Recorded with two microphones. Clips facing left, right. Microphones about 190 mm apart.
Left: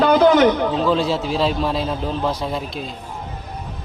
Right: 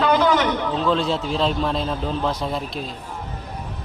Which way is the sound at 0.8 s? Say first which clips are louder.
Left 2 dB; 5° left (ahead or behind).